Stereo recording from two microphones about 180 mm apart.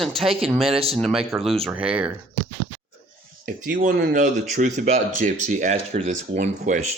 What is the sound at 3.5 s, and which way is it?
Speech, 50° right (ahead or behind).